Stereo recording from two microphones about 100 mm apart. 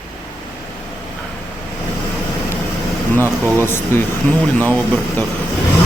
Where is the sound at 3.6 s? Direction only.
25° left (ahead or behind).